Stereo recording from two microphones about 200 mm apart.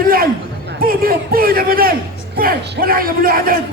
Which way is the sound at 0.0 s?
45° right (ahead or behind).